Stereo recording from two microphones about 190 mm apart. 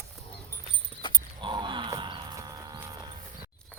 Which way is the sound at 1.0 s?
25° left (ahead or behind).